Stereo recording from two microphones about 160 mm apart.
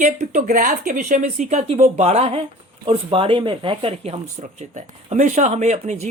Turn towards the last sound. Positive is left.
turn(degrees=-45)  # may be behind; listen again after turning